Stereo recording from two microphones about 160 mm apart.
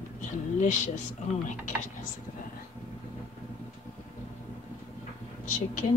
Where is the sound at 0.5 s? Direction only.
50° left (ahead or behind).